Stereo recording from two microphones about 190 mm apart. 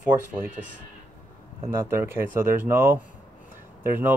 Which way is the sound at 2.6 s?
10° right (ahead or behind).